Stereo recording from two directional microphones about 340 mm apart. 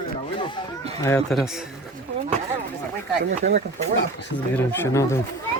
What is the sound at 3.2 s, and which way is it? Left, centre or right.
Speech, right.